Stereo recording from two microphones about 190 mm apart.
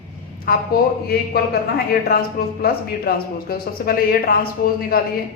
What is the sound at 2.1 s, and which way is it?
Speech, 55° left (ahead or behind).